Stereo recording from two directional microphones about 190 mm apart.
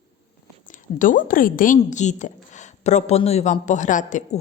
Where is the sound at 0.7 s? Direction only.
45° left (ahead or behind).